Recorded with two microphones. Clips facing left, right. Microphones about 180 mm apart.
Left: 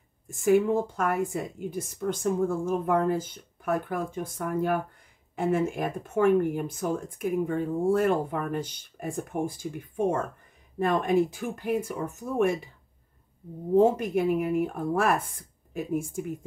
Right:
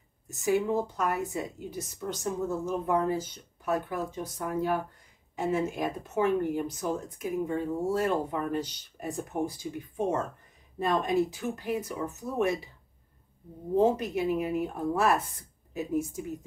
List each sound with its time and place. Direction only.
0.3 s speech: 50° left (ahead or behind)
13.7 s a woman's voice: 50° left (ahead or behind)